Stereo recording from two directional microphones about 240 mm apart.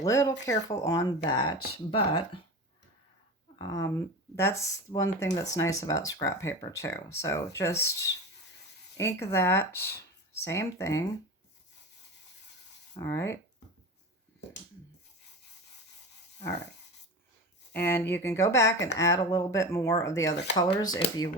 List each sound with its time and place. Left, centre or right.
0.0 s speech: centre
3.6 s speech: centre
13.0 s speech: centre
17.7 s speech: centre